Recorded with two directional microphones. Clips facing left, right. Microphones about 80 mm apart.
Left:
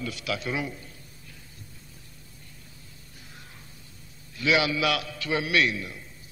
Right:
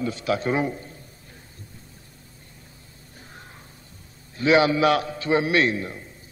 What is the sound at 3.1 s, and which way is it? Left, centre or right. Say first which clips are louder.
Music: right 5 dB; right.